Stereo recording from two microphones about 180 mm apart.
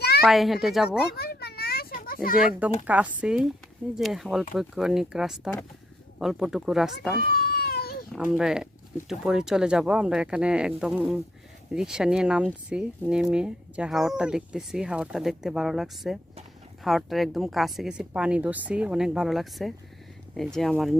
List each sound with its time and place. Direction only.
0.3 s speech: centre (ahead or behind)
1.1 s children playing: 60° left (ahead or behind)
2.8 s speech: 10° right (ahead or behind)
7.3 s baby cry: 60° left (ahead or behind)
8.1 s speech: centre (ahead or behind)